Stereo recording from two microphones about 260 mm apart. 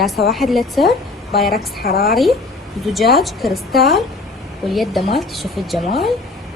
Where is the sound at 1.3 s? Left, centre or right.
Left.